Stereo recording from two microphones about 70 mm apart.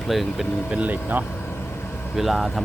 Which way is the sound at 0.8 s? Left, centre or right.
Right.